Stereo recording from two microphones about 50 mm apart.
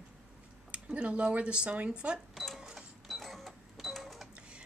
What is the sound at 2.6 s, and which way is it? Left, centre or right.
Cash register, centre.